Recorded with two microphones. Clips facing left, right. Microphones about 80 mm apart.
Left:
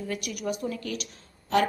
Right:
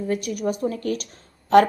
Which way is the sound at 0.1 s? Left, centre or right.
Right.